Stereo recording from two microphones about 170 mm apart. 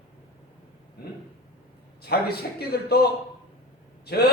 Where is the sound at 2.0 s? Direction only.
70° left (ahead or behind).